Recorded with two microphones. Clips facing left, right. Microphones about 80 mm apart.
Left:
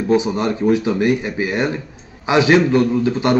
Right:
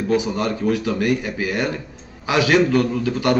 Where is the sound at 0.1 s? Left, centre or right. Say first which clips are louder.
Left 4 dB; left.